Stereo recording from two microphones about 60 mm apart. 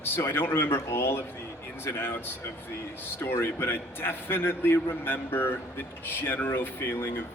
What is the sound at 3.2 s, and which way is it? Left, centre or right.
A man's voice, left.